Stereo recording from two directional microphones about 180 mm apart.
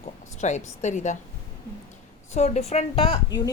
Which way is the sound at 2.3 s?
40° left (ahead or behind).